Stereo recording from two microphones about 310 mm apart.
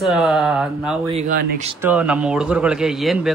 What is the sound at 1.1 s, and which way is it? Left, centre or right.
Speech, right.